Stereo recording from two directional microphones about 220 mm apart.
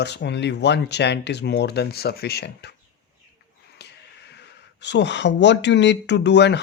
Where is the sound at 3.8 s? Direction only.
50° left (ahead or behind).